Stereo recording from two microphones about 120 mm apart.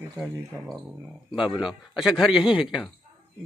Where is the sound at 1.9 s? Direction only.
5° right (ahead or behind).